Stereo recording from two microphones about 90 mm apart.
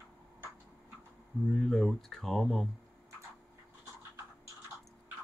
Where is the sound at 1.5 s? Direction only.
5° left (ahead or behind).